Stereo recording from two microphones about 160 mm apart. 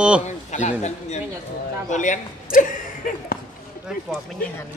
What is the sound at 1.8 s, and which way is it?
Speech, 50° left (ahead or behind).